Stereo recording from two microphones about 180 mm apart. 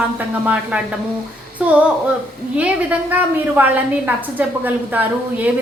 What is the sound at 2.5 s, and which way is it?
A woman's voice, 10° right (ahead or behind).